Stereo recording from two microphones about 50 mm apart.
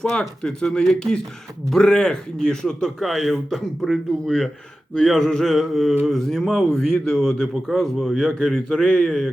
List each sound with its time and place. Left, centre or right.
0.0 s speech: centre
5.0 s speech: centre